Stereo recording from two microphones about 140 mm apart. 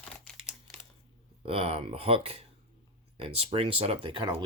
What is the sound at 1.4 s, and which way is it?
Speech, 45° right (ahead or behind).